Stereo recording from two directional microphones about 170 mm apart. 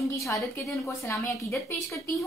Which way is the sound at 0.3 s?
20° left (ahead or behind).